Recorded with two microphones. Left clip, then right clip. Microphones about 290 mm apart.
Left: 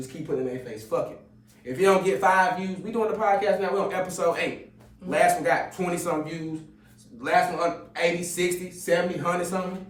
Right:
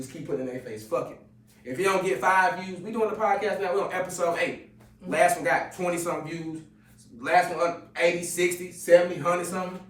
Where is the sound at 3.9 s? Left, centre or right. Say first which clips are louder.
Left 2 dB; centre.